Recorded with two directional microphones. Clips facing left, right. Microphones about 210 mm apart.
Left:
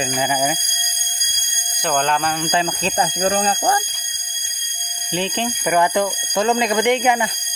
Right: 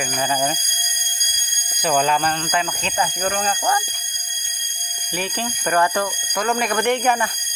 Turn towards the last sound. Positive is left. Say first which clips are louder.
# left 2 dB
turn(degrees=15)  # may be behind; listen again after turning